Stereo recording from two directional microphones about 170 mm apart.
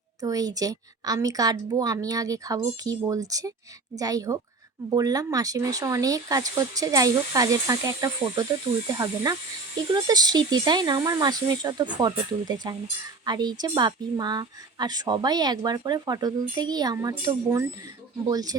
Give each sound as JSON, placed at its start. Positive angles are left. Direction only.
{"t": 0.2, "sound": "a woman's voice", "side_deg": -20}